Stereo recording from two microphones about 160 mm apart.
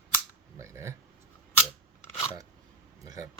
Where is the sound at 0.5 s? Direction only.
20° right (ahead or behind).